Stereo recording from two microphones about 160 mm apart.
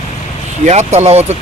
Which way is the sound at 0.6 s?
45° right (ahead or behind).